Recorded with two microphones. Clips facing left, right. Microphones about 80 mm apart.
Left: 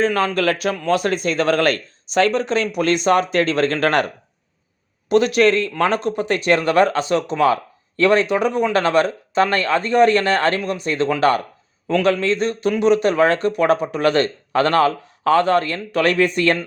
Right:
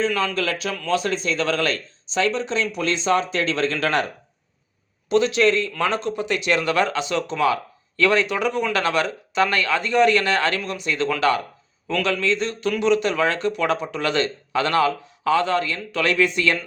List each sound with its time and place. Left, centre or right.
0.0 s speech: left